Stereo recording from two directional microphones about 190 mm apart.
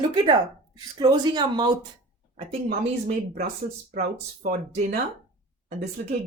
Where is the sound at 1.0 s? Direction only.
20° right (ahead or behind).